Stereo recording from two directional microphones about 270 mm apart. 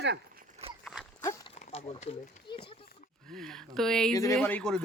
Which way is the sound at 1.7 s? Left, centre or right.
Left.